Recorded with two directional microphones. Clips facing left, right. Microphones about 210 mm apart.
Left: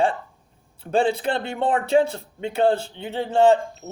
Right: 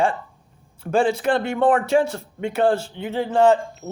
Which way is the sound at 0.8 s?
30° left (ahead or behind).